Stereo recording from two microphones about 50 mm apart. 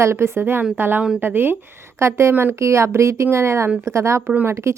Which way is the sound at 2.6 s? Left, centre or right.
Right.